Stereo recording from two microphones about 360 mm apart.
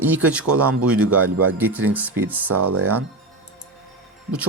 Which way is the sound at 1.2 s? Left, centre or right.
Right.